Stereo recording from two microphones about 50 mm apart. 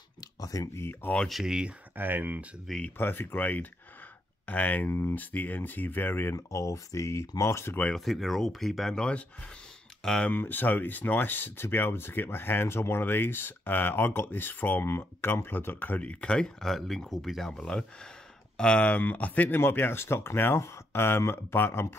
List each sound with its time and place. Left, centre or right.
1.3 s speech: centre
2.0 s speech: right
3.0 s speech: left
6.3 s speech: left
7.9 s speech: centre
8.9 s speech: left
10.3 s speech: left
14.9 s speech: left
16.0 s speech: left; by 17.5 s centre
17.5 s speech: centre
18.8 s speech: left
19.6 s speech: left
20.5 s speech: left